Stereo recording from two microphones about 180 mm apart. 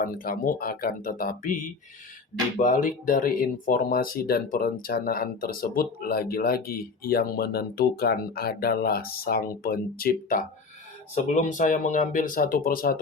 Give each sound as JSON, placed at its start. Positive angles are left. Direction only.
{"t": 0.0, "sound": "speech", "side_deg": 50}
{"t": 2.6, "sound": "speech", "side_deg": 45}